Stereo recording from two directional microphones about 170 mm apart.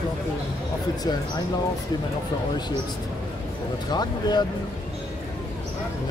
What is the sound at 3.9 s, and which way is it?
Speech, 25° left (ahead or behind).